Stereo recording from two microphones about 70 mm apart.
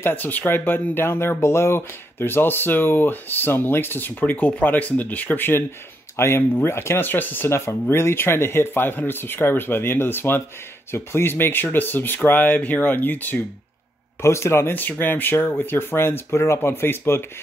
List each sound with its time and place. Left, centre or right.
0.0 s speech: left
6.1 s speech: left
7.4 s speech: left
14.2 s speech: left
14.8 s speech: left